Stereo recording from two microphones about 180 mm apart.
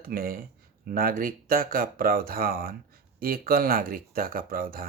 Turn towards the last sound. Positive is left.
turn(degrees=-55)  # may be behind; listen again after turning